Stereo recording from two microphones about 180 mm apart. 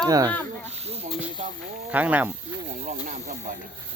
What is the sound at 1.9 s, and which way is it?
Speech, 10° right (ahead or behind).